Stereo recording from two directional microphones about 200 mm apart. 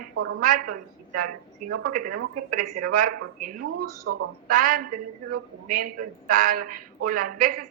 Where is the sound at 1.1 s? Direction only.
40° right (ahead or behind).